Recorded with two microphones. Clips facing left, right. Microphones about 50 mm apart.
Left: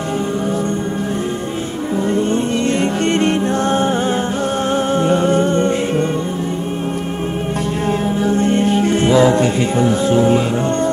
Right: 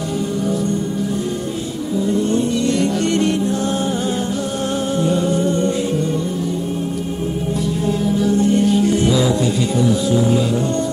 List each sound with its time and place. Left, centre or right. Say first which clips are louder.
3.1 s music: left 2 dB; left
4.9 s music: left 3 dB; left
8.3 s music: even; left